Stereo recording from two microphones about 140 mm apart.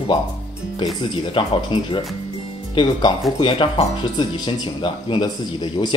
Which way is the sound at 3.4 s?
35° left (ahead or behind).